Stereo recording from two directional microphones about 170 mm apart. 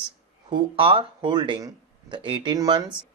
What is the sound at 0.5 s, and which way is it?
Speech, 30° right (ahead or behind).